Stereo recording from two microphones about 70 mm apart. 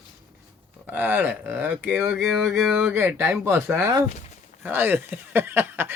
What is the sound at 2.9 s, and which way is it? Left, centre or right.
Speech, right.